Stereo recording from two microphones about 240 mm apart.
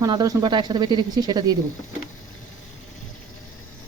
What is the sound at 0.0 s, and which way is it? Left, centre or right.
Speech, centre.